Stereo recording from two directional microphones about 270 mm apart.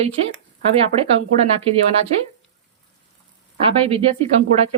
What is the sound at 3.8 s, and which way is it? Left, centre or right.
Speech, right.